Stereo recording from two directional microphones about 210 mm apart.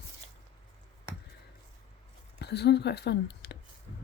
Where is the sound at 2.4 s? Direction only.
55° left (ahead or behind).